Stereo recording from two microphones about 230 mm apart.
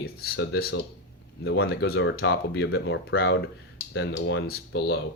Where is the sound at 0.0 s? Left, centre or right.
Left.